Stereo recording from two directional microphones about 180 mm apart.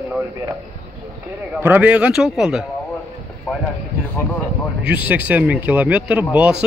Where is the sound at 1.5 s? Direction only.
10° right (ahead or behind).